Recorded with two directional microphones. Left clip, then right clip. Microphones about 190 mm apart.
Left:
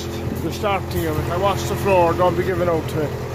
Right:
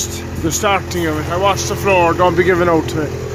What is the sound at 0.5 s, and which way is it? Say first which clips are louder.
Speech: right 7 dB; 20° right (ahead or behind).